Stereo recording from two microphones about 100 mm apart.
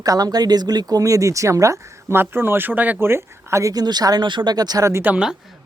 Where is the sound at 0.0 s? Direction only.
40° right (ahead or behind).